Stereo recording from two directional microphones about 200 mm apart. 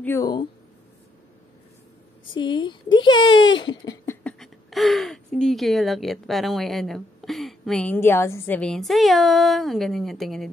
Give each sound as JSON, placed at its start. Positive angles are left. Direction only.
{"t": 0.0, "sound": "speech", "side_deg": 15}
{"t": 2.3, "sound": "speech", "side_deg": 25}